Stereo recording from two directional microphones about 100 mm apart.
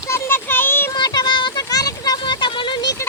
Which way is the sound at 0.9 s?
40° left (ahead or behind).